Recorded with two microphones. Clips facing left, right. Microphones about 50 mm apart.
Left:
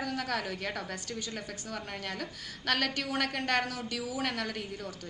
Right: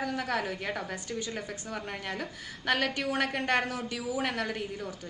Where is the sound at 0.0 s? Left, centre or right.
Centre.